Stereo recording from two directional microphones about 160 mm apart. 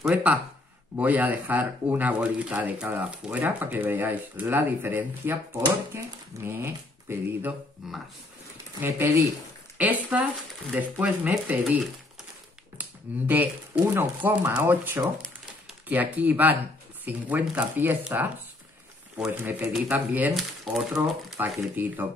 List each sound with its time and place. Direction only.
0.1 s speech: 10° right (ahead or behind)
7.8 s speech: centre (ahead or behind)
8.8 s speech: 15° right (ahead or behind)
13.1 s speech: 10° right (ahead or behind)